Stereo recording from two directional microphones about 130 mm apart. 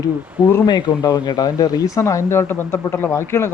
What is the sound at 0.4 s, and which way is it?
A man's voice, 25° left (ahead or behind).